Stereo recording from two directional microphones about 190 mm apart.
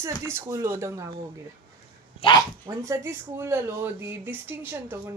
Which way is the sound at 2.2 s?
20° left (ahead or behind).